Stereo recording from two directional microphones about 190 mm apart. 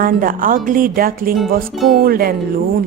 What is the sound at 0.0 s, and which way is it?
Speech, 45° right (ahead or behind).